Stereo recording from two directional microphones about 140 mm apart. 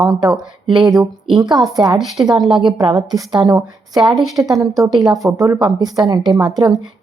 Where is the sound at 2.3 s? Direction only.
Centre (ahead or behind).